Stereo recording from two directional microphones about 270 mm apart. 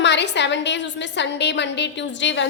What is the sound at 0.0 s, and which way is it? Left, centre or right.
A woman's voice, left.